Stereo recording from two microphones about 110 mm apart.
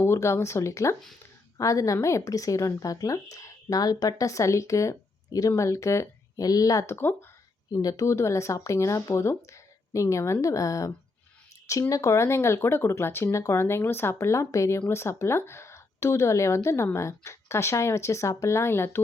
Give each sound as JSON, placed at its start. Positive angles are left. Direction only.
{"t": 0.0, "sound": "a woman's voice", "side_deg": 25}
{"t": 7.7, "sound": "speech", "side_deg": 35}